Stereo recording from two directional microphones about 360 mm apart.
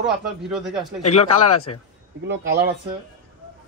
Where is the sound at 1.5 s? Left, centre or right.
Left.